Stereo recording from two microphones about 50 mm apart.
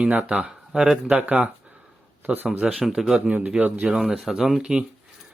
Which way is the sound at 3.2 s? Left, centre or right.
Right.